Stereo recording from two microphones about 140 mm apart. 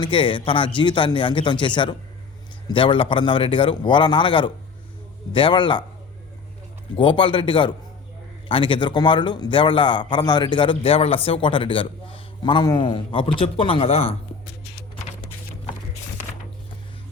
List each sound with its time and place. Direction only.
0.0 s a man's voice: 35° left (ahead or behind)
6.9 s a man's voice: 35° left (ahead or behind)